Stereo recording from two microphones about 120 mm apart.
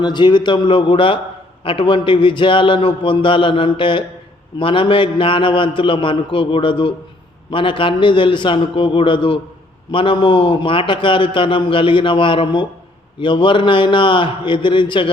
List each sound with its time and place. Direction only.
0.0 s a man's voice: 40° left (ahead or behind)